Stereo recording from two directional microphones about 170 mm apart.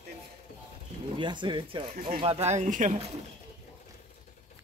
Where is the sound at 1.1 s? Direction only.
30° right (ahead or behind); by 2.9 s 45° right (ahead or behind).